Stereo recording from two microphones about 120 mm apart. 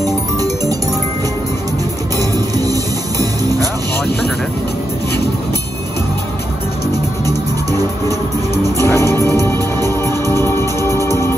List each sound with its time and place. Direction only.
2.1 s music: 30° right (ahead or behind)
8.7 s music: 25° left (ahead or behind)